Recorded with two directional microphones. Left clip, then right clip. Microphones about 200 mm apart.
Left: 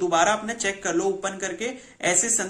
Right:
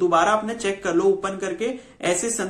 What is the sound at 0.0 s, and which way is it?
Speech, 10° left (ahead or behind).